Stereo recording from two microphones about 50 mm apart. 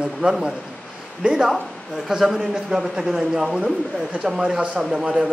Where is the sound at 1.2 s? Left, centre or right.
Centre.